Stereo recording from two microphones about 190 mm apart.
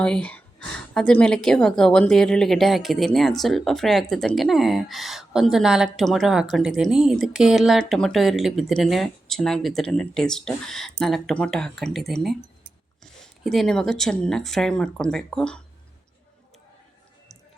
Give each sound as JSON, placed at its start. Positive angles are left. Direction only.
{"t": 0.0, "sound": "a woman's voice", "side_deg": 5}
{"t": 13.4, "sound": "a woman's voice", "side_deg": 0}